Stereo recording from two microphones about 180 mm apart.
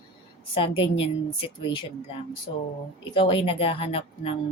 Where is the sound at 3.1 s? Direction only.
30° left (ahead or behind).